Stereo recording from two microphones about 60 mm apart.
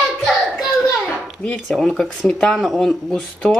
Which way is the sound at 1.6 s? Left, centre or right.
Centre.